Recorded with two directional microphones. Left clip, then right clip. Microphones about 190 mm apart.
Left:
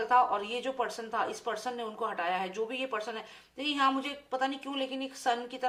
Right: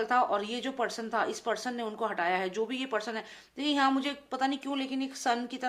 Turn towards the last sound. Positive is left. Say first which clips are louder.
# even
turn(degrees=-45)  # may be behind; listen again after turning